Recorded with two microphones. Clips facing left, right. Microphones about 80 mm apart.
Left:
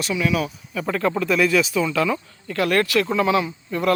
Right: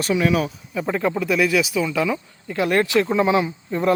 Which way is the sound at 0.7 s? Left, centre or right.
Centre.